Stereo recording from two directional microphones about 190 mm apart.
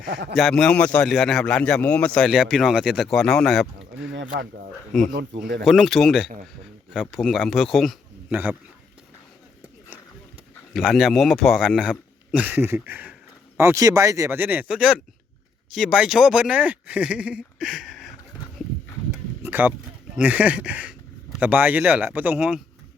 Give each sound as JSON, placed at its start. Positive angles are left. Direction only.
{"t": 0.0, "sound": "a man's voice", "side_deg": -65}
{"t": 0.3, "sound": "speech", "side_deg": 0}
{"t": 5.6, "sound": "speech", "side_deg": 0}
{"t": 10.8, "sound": "speech", "side_deg": 0}
{"t": 19.4, "sound": "a sound", "side_deg": -10}
{"t": 20.1, "sound": "speech", "side_deg": -10}